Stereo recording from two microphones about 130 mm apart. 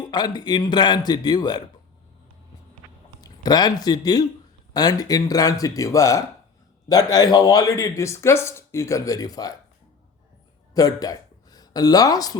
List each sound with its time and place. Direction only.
0.0 s speech: 35° left (ahead or behind)
3.2 s speech: 30° left (ahead or behind)
10.8 s a woman's voice: 30° left (ahead or behind)